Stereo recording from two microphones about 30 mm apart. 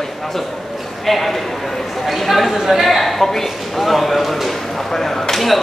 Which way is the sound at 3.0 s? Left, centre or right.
Centre.